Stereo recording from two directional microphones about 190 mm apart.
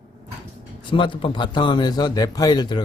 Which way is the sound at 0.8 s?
25° left (ahead or behind).